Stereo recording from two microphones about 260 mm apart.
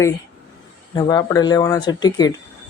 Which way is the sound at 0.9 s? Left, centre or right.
Centre.